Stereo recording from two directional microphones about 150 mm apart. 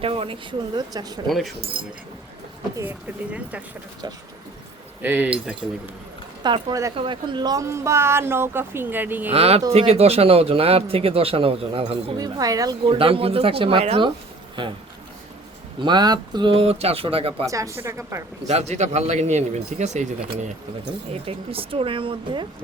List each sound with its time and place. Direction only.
0.0 s speech: 40° right (ahead or behind)
1.3 s speech: centre (ahead or behind)
1.7 s speech: 35° right (ahead or behind)
5.0 s speech: 10° right (ahead or behind)
6.4 s a woman's voice: 30° right (ahead or behind); by 9.3 s 10° right (ahead or behind)
9.3 s speech: 45° right (ahead or behind)
12.1 s speech: 25° right (ahead or behind)
15.8 s speech: 30° right (ahead or behind)
17.4 s a woman's voice: 20° right (ahead or behind)
18.4 s speech: 50° right (ahead or behind)
21.2 s speech: 40° right (ahead or behind)